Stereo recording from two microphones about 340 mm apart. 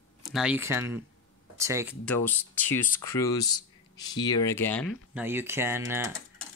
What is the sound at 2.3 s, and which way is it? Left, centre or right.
Speech, centre.